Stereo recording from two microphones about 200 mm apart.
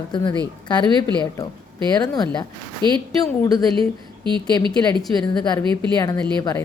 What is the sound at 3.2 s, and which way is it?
Speech, 20° left (ahead or behind).